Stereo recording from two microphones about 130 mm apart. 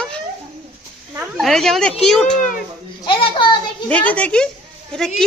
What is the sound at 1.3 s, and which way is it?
Speech, 5° left (ahead or behind).